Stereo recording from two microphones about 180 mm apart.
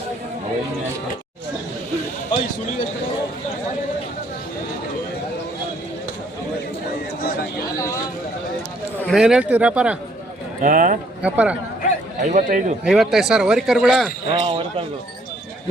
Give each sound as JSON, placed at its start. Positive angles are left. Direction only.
{"t": 9.0, "sound": "a man's voice", "side_deg": -5}
{"t": 10.6, "sound": "a man's voice", "side_deg": -50}
{"t": 11.2, "sound": "a man's voice", "side_deg": -5}
{"t": 12.2, "sound": "a man's voice", "side_deg": -45}
{"t": 12.8, "sound": "a man's voice", "side_deg": -5}
{"t": 14.3, "sound": "speech", "side_deg": -30}